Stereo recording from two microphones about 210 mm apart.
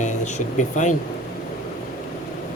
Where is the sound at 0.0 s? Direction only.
35° left (ahead or behind).